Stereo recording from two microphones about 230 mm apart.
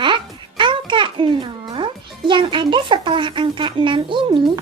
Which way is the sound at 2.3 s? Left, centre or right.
Right.